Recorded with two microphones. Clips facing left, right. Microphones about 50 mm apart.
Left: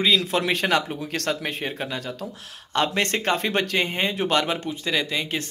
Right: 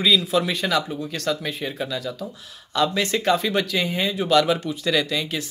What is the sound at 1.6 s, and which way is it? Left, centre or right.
Speech, left.